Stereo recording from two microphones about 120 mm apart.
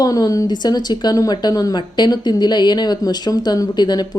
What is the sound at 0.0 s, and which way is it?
Speech, 30° left (ahead or behind).